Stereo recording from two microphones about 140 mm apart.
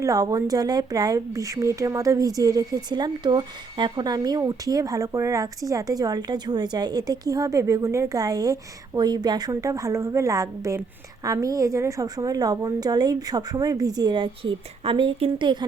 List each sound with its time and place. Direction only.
0.0 s a woman's voice: 25° right (ahead or behind)
14.8 s speech: 40° right (ahead or behind)